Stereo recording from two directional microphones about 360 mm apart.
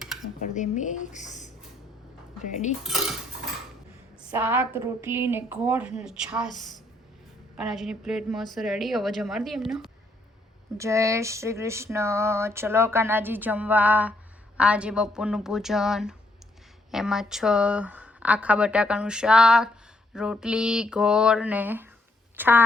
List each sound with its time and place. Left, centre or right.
0.3 s speech: centre
2.4 s cutlery: centre
2.8 s speech: centre
4.2 s speech: centre
10.8 s a sound: centre
14.6 s speech: centre